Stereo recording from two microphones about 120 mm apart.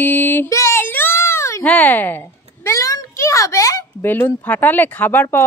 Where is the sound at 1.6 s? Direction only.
10° left (ahead or behind).